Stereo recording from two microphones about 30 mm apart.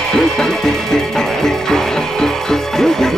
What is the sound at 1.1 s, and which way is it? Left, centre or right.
Music, centre.